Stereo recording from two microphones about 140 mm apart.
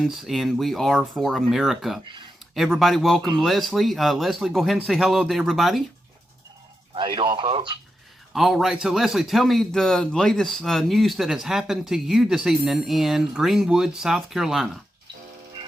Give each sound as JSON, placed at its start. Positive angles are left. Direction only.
{"t": 0.0, "sound": "a man's voice", "side_deg": 0}
{"t": 6.9, "sound": "speech", "side_deg": -35}
{"t": 8.3, "sound": "a man's voice", "side_deg": 0}